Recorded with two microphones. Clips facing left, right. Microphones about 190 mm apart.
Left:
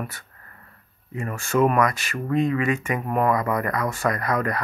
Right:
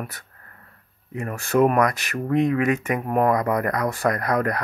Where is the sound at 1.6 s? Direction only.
60° right (ahead or behind).